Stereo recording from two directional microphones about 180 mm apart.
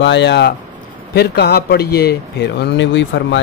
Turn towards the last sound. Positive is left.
turn(degrees=90)